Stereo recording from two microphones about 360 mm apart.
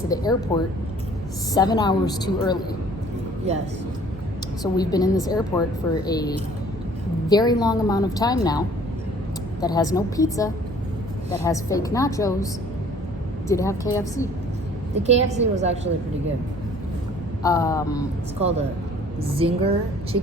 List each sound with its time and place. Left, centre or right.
0.1 s a woman's voice: centre
4.6 s a woman's voice: centre
13.5 s a woman's voice: centre
14.9 s a woman's voice: centre
17.4 s a woman's voice: centre
18.3 s a woman's voice: centre